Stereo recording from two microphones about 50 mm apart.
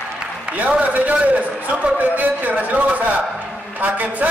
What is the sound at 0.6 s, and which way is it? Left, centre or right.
A man's voice, right.